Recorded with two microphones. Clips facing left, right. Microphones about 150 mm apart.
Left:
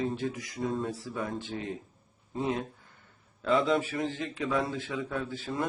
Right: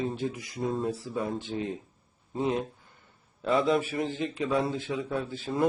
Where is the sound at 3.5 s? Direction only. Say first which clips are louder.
Right 1 dB; 30° right (ahead or behind).